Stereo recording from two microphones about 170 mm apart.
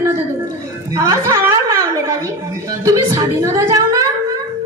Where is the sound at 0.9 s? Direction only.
20° right (ahead or behind).